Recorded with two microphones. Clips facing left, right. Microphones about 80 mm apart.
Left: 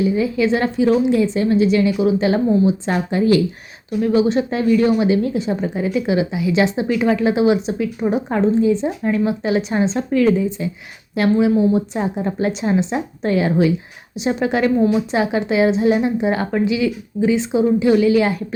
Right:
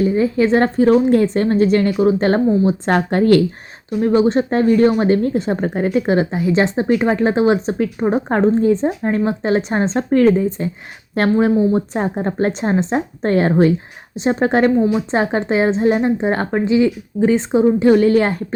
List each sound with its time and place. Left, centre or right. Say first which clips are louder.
0.0 s a woman's voice: right 2 dB; right
4.0 s a woman's voice: right 2 dB; right